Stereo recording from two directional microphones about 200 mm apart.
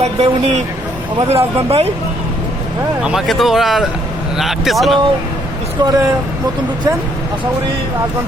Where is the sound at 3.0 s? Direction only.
Centre (ahead or behind).